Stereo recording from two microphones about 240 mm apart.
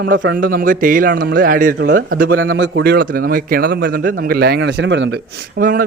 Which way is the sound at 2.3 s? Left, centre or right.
Right.